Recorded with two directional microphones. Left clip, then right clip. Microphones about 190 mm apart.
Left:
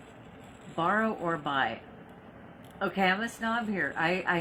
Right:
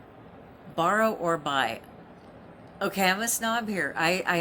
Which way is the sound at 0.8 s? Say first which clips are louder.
Right 4 dB; 25° right (ahead or behind).